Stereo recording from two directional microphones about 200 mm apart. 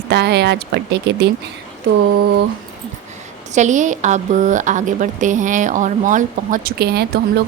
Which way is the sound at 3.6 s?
35° right (ahead or behind).